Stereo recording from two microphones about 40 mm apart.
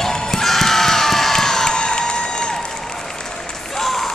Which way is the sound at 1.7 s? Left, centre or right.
Left.